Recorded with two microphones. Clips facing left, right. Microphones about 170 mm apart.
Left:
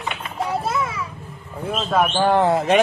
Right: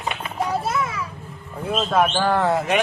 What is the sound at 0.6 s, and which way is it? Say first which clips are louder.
Children playing: left 1 dB; 25° left (ahead or behind).